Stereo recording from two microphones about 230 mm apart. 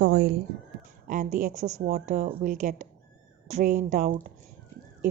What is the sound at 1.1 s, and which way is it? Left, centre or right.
A woman's voice, right.